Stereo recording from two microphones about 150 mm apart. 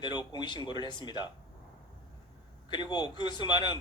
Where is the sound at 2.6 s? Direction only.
30° left (ahead or behind).